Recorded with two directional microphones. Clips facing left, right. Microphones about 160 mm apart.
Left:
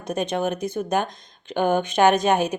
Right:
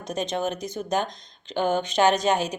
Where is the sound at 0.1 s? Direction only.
55° left (ahead or behind).